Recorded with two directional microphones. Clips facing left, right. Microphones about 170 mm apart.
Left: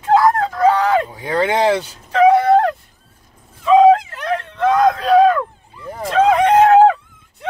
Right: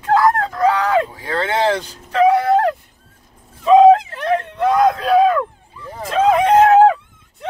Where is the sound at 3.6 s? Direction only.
25° right (ahead or behind).